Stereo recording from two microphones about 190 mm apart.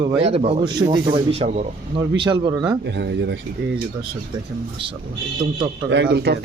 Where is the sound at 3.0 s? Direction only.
65° right (ahead or behind).